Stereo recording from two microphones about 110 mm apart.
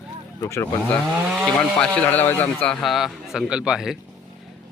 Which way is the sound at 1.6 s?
10° left (ahead or behind).